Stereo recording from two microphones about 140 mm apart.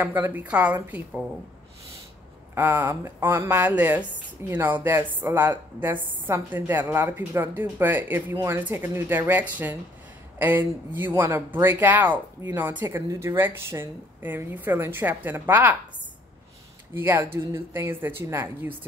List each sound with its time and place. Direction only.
0.0 s speech: 15° right (ahead or behind)
2.5 s speech: 15° right (ahead or behind)
16.9 s speech: 15° right (ahead or behind)